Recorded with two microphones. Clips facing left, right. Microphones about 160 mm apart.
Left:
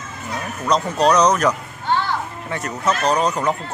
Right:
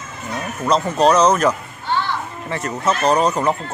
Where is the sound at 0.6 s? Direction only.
5° right (ahead or behind).